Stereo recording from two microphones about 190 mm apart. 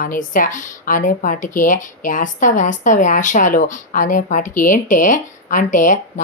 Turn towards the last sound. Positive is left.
turn(degrees=45)  # may be behind; listen again after turning